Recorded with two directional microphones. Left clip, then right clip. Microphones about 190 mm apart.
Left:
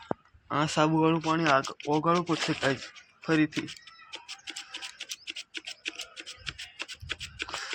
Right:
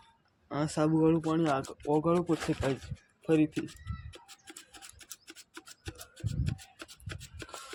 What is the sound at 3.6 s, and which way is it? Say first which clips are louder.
Music: left 3 dB; 30° right (ahead or behind).